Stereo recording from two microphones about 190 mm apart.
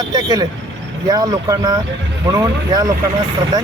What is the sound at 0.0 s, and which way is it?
Speech, 20° right (ahead or behind).